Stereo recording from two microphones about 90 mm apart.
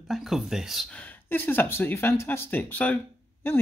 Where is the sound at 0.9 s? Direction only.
15° left (ahead or behind).